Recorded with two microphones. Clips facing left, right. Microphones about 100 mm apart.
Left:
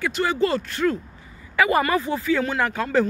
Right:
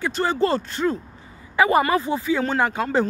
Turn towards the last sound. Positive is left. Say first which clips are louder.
# even
turn(degrees=-25)  # may be behind; listen again after turning